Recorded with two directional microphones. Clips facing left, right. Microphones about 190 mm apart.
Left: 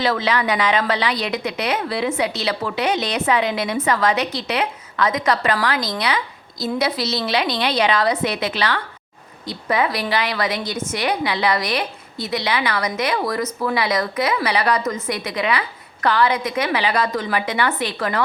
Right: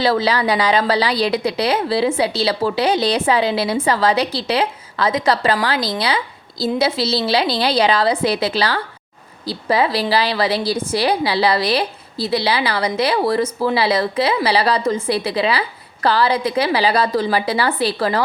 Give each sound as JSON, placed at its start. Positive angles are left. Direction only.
{"t": 0.0, "sound": "a woman's voice", "side_deg": -35}